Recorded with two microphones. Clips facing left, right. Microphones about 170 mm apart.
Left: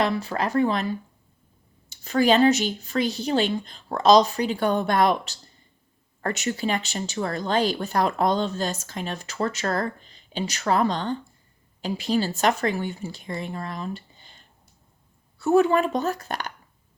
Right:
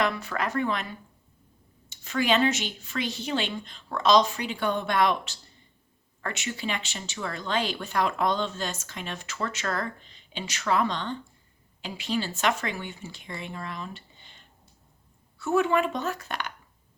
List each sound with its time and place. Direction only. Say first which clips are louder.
0.0 s speech: left 3 dB; 30° left (ahead or behind)